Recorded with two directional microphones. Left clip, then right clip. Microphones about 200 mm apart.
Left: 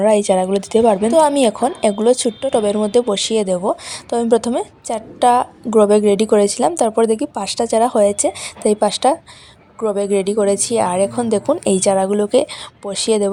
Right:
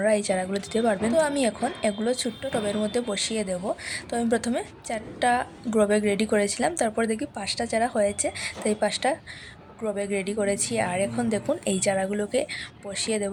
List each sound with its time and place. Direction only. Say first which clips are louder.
0.0 s a woman's voice: left 10 dB; 35° left (ahead or behind)